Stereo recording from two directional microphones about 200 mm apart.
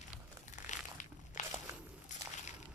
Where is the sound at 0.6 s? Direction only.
40° left (ahead or behind).